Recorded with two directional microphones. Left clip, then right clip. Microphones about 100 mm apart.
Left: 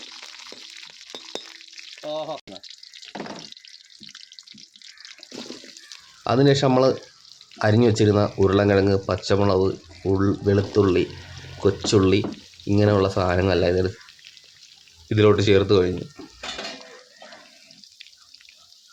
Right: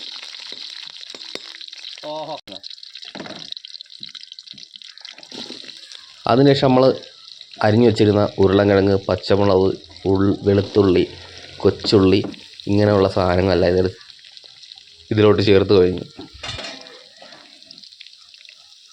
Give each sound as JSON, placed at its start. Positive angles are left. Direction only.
{"t": 0.0, "sound": "a sound", "side_deg": -25}
{"t": 2.0, "sound": "speech", "side_deg": -25}
{"t": 6.2, "sound": "speech", "side_deg": -25}
{"t": 15.1, "sound": "speech", "side_deg": -20}